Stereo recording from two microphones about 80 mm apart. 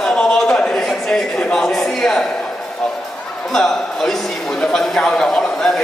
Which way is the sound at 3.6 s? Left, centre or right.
Centre.